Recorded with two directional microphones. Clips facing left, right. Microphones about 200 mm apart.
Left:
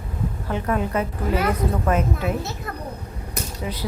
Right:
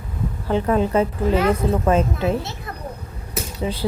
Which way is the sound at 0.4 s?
30° right (ahead or behind).